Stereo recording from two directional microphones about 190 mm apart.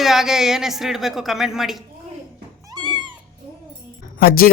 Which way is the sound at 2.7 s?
25° right (ahead or behind).